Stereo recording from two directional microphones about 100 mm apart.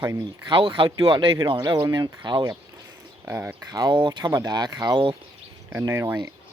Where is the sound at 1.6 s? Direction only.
40° right (ahead or behind).